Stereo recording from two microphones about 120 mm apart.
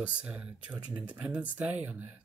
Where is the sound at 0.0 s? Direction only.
10° right (ahead or behind).